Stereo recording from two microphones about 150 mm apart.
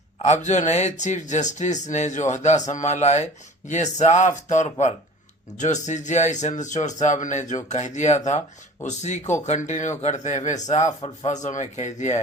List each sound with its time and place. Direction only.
0.2 s speech: 50° left (ahead or behind)